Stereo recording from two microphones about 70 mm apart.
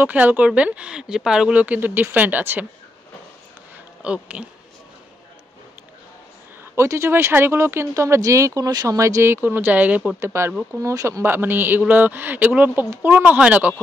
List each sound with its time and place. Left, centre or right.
0.0 s speech: right
4.0 s speech: centre
6.6 s speech: right
10.2 s speech: right
11.2 s speech: right